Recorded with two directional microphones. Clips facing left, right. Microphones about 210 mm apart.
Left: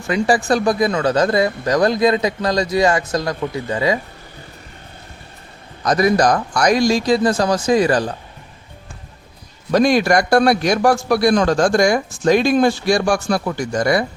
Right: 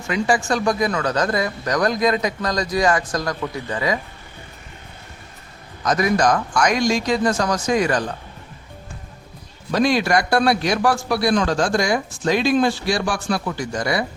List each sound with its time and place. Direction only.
0.1 s speech: 35° left (ahead or behind)
5.8 s a man's voice: 35° left (ahead or behind)
9.7 s a man's voice: 45° left (ahead or behind)